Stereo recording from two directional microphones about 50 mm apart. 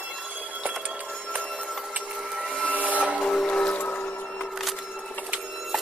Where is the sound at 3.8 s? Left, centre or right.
Left.